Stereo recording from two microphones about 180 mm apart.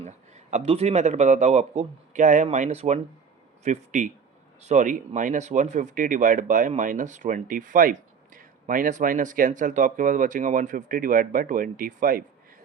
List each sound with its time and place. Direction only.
0.0 s speech: 40° right (ahead or behind)